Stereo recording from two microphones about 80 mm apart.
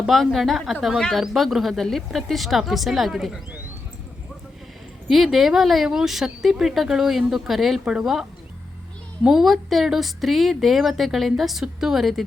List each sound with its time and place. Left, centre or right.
0.1 s speech: centre
5.0 s speech: centre